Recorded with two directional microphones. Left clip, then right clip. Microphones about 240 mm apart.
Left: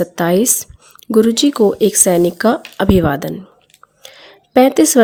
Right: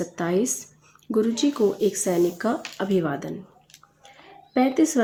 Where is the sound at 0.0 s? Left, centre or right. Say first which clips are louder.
Left 10 dB; left.